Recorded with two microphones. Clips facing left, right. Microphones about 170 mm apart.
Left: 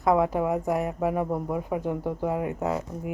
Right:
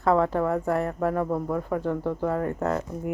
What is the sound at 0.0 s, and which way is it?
Speech, 15° left (ahead or behind).